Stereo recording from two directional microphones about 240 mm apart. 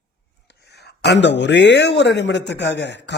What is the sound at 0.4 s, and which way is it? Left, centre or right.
A man's voice, left.